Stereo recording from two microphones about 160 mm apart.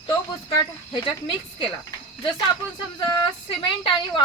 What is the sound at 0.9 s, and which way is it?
Speech, 35° left (ahead or behind).